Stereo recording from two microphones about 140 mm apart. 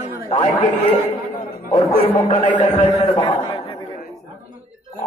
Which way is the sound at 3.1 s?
35° left (ahead or behind).